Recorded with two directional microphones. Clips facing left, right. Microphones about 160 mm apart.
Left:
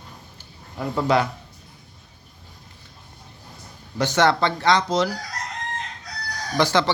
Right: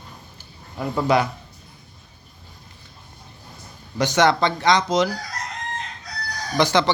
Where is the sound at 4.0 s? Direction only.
15° right (ahead or behind).